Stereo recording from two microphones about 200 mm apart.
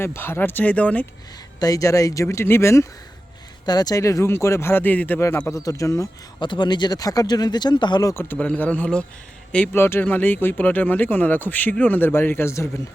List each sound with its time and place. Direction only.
0.0 s speech: 10° left (ahead or behind)